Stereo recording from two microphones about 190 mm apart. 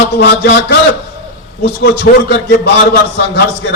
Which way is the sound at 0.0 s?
65° left (ahead or behind).